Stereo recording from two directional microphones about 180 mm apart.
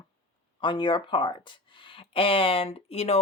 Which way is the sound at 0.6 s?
25° left (ahead or behind).